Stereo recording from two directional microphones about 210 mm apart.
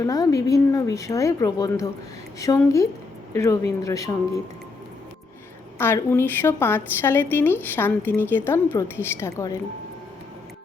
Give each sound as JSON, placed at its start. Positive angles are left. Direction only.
{"t": 0.0, "sound": "a woman's voice", "side_deg": 15}
{"t": 5.8, "sound": "a woman's voice", "side_deg": 10}